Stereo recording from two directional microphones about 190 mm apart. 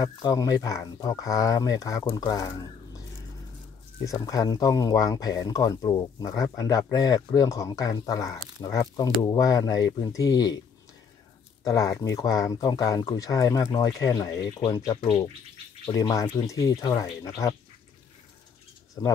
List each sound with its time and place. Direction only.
0.0 s speech: 20° left (ahead or behind)
4.0 s speech: 20° left (ahead or behind)
11.6 s speech: 20° left (ahead or behind)
19.0 s speech: 20° left (ahead or behind)